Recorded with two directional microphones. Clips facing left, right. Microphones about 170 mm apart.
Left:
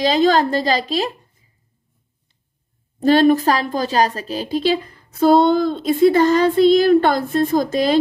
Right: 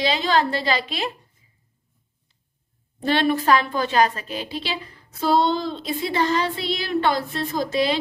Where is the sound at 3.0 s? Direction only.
40° left (ahead or behind).